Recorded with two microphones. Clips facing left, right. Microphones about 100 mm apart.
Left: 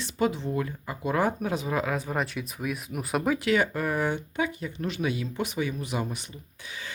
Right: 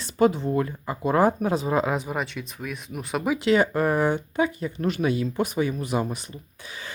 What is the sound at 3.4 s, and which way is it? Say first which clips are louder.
Speech: right 5 dB; 30° right (ahead or behind).